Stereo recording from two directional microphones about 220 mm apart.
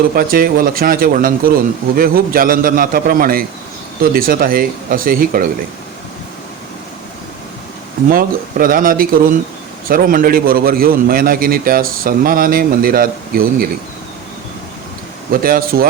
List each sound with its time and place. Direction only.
0.2 s a man's voice: 40° right (ahead or behind)
8.1 s a man's voice: 40° right (ahead or behind)
15.3 s a man's voice: 40° right (ahead or behind)